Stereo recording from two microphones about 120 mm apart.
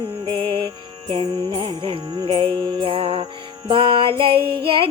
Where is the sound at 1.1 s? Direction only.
40° right (ahead or behind).